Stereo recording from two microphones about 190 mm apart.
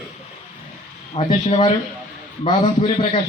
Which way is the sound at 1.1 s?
35° left (ahead or behind).